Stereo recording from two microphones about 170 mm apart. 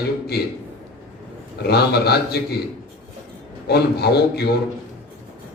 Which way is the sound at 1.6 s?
70° left (ahead or behind).